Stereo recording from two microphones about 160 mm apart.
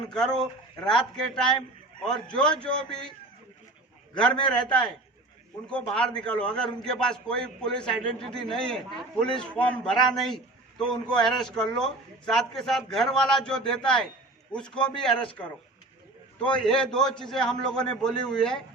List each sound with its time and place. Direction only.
0.1 s a man's voice: 5° left (ahead or behind)
4.5 s a man's voice: 5° left (ahead or behind)
16.4 s a man's voice: 5° left (ahead or behind)